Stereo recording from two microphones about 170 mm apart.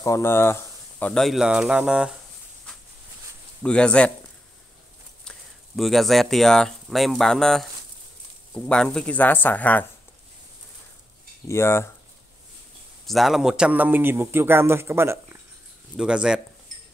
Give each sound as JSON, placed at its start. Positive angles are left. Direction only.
{"t": 0.0, "sound": "speech", "side_deg": 15}
{"t": 3.6, "sound": "speech", "side_deg": 5}
{"t": 5.2, "sound": "speech", "side_deg": 0}
{"t": 11.4, "sound": "speech", "side_deg": 15}
{"t": 13.0, "sound": "a man's voice", "side_deg": 0}
{"t": 16.0, "sound": "speech", "side_deg": -5}